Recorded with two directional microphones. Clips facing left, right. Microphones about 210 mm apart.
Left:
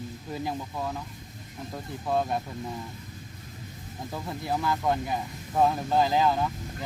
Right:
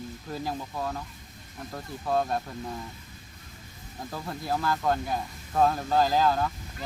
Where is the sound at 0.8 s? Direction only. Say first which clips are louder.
Even; 5° left (ahead or behind).